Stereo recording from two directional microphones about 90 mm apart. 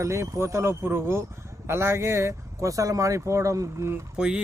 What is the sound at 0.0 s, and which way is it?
Speech, 30° right (ahead or behind).